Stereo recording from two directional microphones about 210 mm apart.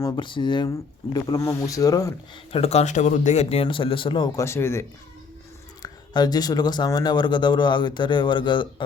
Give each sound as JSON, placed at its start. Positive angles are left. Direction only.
{"t": 0.0, "sound": "speech", "side_deg": 25}
{"t": 2.5, "sound": "speech", "side_deg": 30}